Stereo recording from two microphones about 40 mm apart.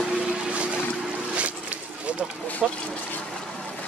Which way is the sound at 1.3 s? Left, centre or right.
Right.